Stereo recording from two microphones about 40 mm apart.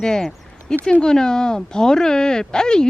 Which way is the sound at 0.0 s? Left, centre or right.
Centre.